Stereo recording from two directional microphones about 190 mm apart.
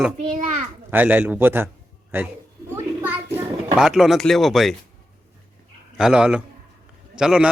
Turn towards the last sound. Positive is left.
turn(degrees=-5)  # may be behind; listen again after turning